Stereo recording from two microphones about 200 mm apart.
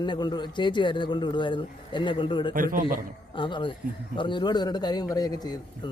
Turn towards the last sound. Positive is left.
turn(degrees=20)  # may be behind; listen again after turning